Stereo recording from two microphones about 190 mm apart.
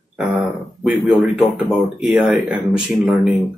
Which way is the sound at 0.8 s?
5° right (ahead or behind).